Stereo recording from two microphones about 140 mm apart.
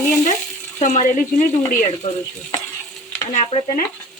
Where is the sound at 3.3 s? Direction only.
55° left (ahead or behind).